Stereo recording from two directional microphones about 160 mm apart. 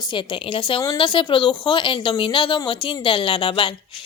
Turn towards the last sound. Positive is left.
turn(degrees=30)  # may be behind; listen again after turning